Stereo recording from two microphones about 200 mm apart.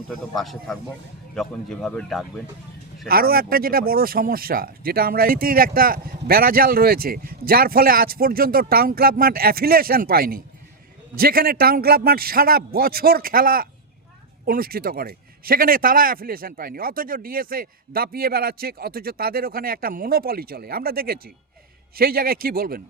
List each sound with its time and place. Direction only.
0.1 s speech: centre (ahead or behind)
3.1 s speech: 50° right (ahead or behind)